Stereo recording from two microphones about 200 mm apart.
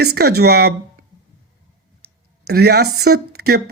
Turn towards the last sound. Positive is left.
turn(degrees=-50)  # may be behind; listen again after turning